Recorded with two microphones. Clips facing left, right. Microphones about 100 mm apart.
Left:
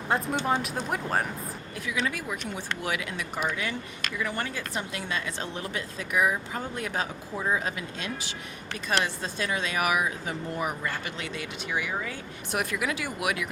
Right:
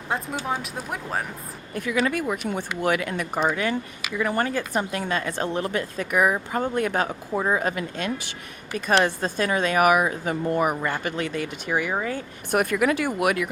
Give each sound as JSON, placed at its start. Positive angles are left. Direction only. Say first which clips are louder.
{"t": 0.1, "sound": "speech", "louder": "left 1 dB", "side_deg": 0}
{"t": 1.7, "sound": "speech", "louder": "right 7 dB", "side_deg": -50}